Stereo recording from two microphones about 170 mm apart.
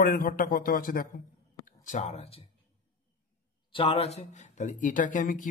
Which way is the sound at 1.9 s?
45° left (ahead or behind).